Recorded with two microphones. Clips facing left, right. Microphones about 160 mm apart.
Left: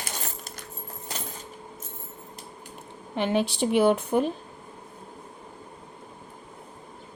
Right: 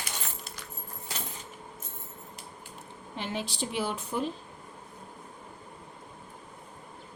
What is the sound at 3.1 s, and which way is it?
A woman's voice, 60° left (ahead or behind).